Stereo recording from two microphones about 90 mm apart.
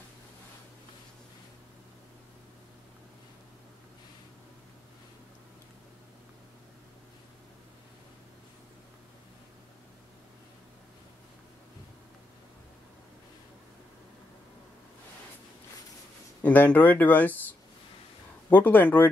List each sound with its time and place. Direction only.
16.4 s speech: 20° left (ahead or behind)
18.5 s speech: 20° left (ahead or behind)